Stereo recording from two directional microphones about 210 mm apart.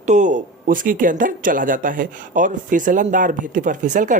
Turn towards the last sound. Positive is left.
turn(degrees=-35)  # may be behind; listen again after turning